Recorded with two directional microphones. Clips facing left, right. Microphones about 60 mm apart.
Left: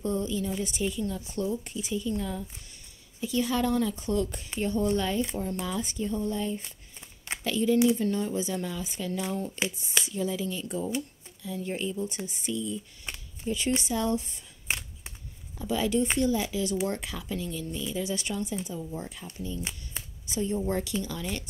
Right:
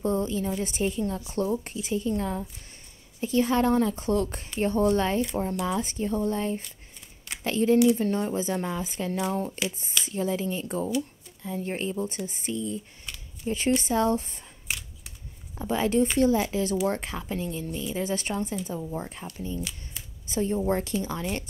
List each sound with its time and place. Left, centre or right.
0.0 s a woman's voice: right
13.0 s a sound: left
13.5 s a woman's voice: right
14.7 s scissors: left
15.5 s a woman's voice: right